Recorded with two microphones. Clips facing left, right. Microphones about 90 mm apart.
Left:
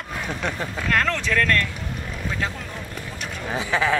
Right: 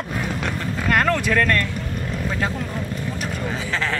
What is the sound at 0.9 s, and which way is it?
Speech, 10° right (ahead or behind).